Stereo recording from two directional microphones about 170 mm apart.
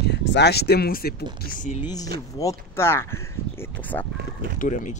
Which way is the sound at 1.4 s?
50° left (ahead or behind).